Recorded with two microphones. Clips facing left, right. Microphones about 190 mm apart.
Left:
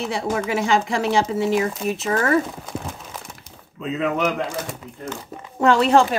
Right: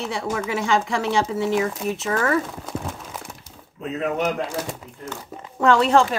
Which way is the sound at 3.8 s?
90° left.